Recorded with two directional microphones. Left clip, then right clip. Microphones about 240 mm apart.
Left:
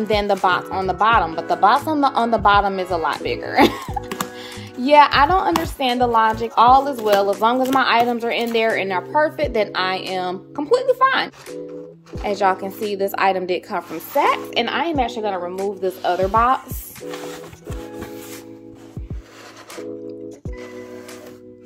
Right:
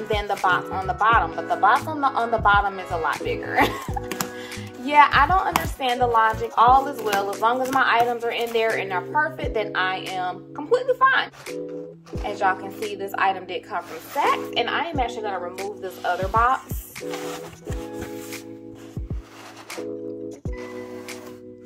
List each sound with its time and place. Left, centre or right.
0.1 s speech: left
20.2 s music: centre